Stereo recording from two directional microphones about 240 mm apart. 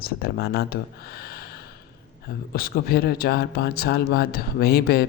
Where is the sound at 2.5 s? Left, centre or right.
Left.